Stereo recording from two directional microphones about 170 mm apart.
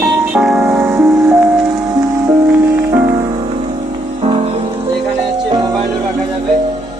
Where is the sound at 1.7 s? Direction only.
20° right (ahead or behind).